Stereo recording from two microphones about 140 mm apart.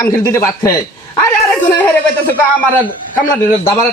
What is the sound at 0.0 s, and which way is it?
Speech, 20° left (ahead or behind).